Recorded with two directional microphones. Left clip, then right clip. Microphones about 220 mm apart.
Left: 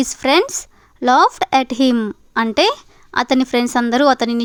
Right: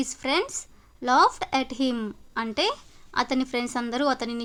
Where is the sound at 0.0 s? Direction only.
35° left (ahead or behind).